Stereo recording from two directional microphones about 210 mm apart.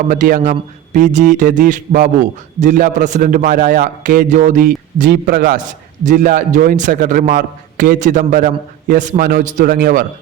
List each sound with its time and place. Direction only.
0.1 s a man's voice: 40° right (ahead or behind)